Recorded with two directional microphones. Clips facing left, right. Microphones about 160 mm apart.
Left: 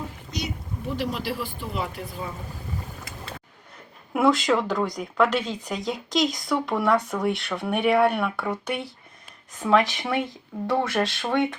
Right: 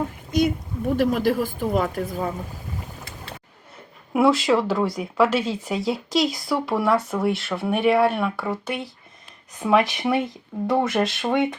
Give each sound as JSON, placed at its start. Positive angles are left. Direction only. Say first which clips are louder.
{"t": 0.3, "sound": "speech", "louder": "right 13 dB", "side_deg": -50}
{"t": 4.1, "sound": "speech", "louder": "right 2 dB", "side_deg": 0}
{"t": 9.6, "sound": "speech", "louder": "right 1 dB", "side_deg": -10}